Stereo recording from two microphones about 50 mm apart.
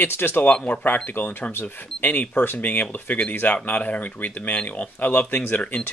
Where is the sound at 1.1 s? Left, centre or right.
Left.